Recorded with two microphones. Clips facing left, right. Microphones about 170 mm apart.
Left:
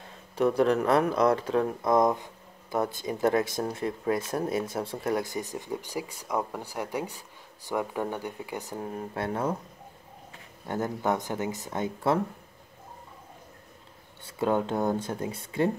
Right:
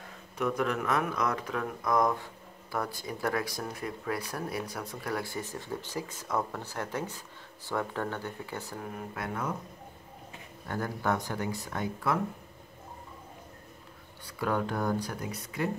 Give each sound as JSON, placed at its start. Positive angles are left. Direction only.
{"t": 0.4, "sound": "speech", "side_deg": 30}
{"t": 10.7, "sound": "speech", "side_deg": 20}
{"t": 14.2, "sound": "speech", "side_deg": 25}